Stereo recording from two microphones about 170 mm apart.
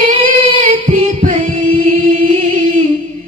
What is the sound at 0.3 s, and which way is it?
Singing, 45° right (ahead or behind).